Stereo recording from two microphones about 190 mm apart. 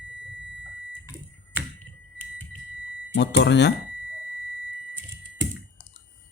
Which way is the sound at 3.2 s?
65° left (ahead or behind).